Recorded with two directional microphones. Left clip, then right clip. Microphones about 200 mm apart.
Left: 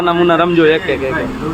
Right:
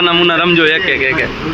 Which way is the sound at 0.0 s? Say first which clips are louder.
Right 1 dB; 5° left (ahead or behind).